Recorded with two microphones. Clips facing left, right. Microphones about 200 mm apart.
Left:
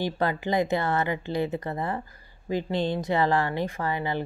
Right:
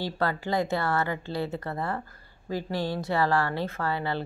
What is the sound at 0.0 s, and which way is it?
A woman's voice, 15° left (ahead or behind).